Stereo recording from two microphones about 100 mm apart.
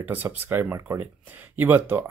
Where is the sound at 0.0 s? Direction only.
20° right (ahead or behind).